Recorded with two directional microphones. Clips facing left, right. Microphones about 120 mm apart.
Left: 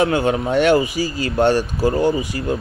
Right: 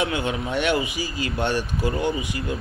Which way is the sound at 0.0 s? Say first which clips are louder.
Left 8 dB; 40° left (ahead or behind).